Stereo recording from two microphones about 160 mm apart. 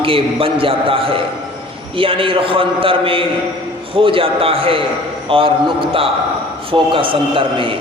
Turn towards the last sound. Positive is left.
turn(degrees=-35)  # may be behind; listen again after turning